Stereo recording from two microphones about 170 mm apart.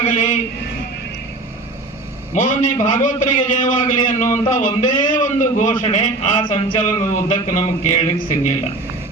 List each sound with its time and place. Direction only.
0.0 s speech: 50° left (ahead or behind)
2.3 s a man's voice: 50° left (ahead or behind)